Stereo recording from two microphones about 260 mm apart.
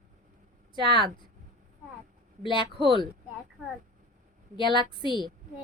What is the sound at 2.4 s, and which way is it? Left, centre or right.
Speech, centre.